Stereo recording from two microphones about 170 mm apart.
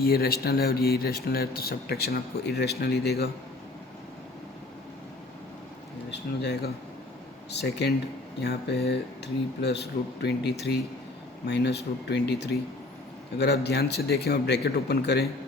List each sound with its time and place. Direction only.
0.0 s speech: 65° left (ahead or behind)
6.1 s speech: 80° left